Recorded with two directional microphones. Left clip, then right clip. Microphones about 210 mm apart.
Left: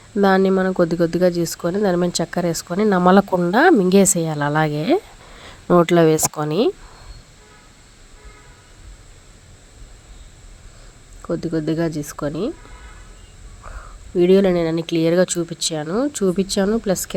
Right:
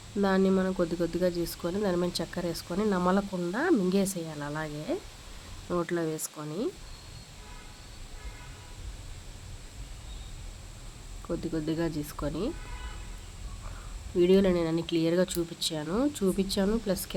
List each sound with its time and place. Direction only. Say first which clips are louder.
0.2 s speech: left 11 dB; 35° left (ahead or behind)
11.3 s speech: left 10 dB; 30° left (ahead or behind)
14.2 s speech: left 9 dB; 30° left (ahead or behind)